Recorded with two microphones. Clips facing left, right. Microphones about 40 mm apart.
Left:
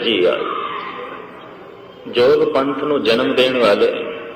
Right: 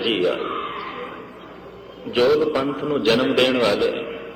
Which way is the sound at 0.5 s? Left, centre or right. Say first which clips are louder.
Left 4 dB; centre.